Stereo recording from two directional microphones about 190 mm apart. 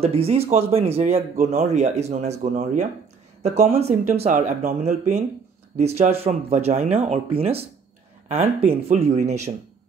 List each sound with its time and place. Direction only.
0.0 s speech: 30° right (ahead or behind)